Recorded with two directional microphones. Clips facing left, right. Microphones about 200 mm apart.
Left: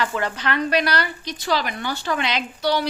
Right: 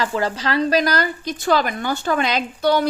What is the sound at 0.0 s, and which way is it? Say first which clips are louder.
A woman's voice: right 3 dB; 35° right (ahead or behind).